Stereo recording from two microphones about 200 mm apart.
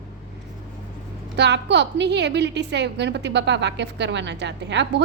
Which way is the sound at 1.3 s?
60° right (ahead or behind).